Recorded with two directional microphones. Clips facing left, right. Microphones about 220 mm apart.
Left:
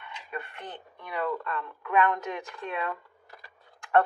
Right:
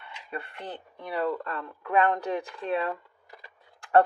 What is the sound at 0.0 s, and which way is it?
Speech, 35° right (ahead or behind).